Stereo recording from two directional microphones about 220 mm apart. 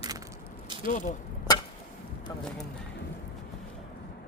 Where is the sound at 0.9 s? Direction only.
35° left (ahead or behind).